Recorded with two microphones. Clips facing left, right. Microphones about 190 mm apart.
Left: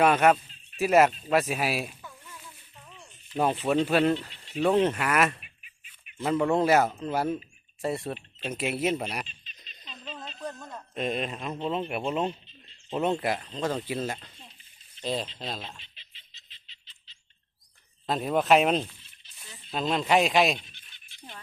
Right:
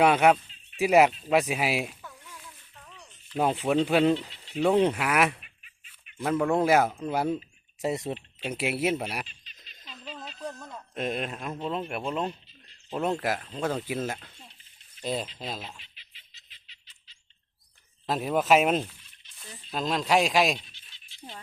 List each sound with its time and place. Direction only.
0.0 s speech: 10° right (ahead or behind)
2.0 s fowl: 5° right (ahead or behind)
2.4 s a sound: 10° left (ahead or behind)
3.3 s speech: 10° right (ahead or behind)
9.2 s insect: 20° left (ahead or behind)
10.5 s speech: centre (ahead or behind)
12.9 s speech: centre (ahead or behind)
15.8 s a sound: 30° left (ahead or behind)
18.0 s speech: 5° right (ahead or behind)
20.7 s a sound: 55° left (ahead or behind)